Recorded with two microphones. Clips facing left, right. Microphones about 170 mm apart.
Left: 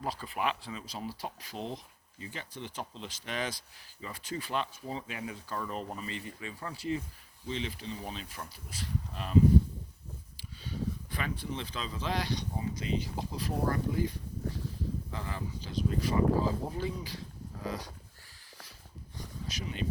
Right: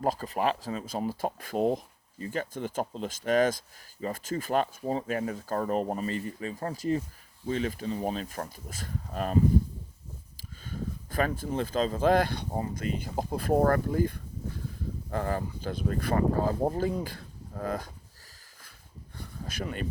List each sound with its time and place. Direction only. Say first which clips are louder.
0.0 s speech: right 6 dB; 45° right (ahead or behind)
10.6 s speech: left 1 dB; 45° right (ahead or behind)
19.1 s a sound: right 3 dB; 55° right (ahead or behind)